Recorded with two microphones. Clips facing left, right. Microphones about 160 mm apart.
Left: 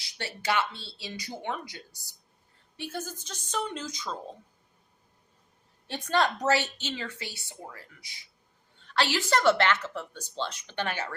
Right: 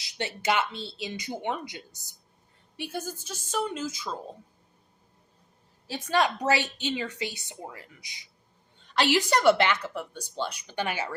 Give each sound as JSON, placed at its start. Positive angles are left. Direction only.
{"t": 0.2, "sound": "a woman's voice", "side_deg": -20}
{"t": 5.9, "sound": "a woman's voice", "side_deg": -10}